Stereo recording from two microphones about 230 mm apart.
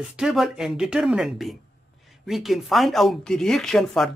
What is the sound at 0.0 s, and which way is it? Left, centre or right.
Speech, centre.